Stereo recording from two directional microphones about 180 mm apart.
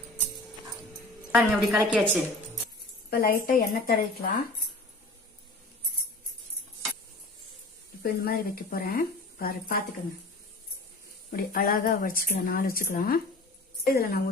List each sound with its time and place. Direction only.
1.3 s a woman's voice: centre (ahead or behind)
3.1 s speech: 55° left (ahead or behind)
8.0 s speech: 55° left (ahead or behind)
11.3 s speech: 55° left (ahead or behind)